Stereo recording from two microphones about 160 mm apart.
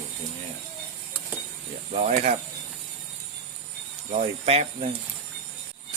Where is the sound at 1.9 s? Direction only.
45° right (ahead or behind).